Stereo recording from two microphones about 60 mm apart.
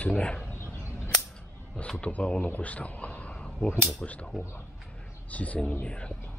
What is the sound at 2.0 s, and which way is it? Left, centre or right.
Speech, left.